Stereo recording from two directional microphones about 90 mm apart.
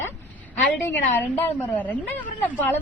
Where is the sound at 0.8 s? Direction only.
25° left (ahead or behind).